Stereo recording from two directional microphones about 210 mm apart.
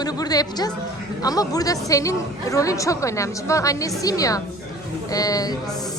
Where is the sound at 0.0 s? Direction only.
20° left (ahead or behind).